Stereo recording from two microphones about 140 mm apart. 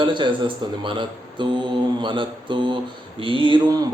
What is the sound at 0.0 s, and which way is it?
Speech, 35° right (ahead or behind).